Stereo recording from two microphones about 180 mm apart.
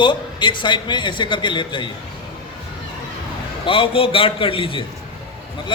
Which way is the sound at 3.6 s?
30° left (ahead or behind).